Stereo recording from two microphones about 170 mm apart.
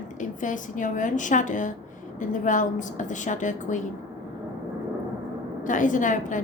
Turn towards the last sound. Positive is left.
turn(degrees=50)  # may be behind; listen again after turning